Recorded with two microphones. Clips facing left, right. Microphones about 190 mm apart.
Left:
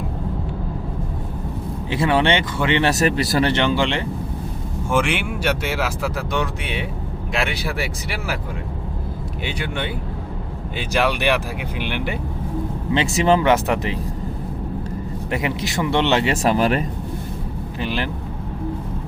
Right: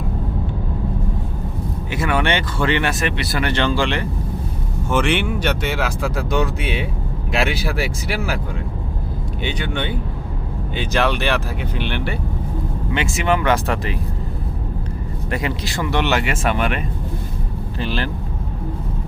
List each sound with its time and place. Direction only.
1.9 s speech: 30° left (ahead or behind)
2.9 s speech: 40° left (ahead or behind)
3.5 s speech: 20° left (ahead or behind)
4.9 s speech: 10° left (ahead or behind)
9.4 s speech: 5° left (ahead or behind)
12.9 s speech: 30° left (ahead or behind)
15.3 s speech: 20° left (ahead or behind)
17.7 s speech: 15° left (ahead or behind)